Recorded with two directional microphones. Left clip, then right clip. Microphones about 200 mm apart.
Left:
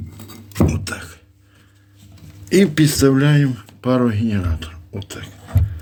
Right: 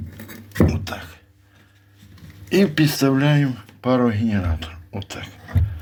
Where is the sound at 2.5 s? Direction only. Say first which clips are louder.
Left 3 dB; 30° left (ahead or behind); by 5.3 s 10° left (ahead or behind).